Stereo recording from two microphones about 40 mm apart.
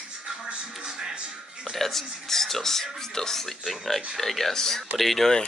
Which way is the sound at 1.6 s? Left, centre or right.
Centre.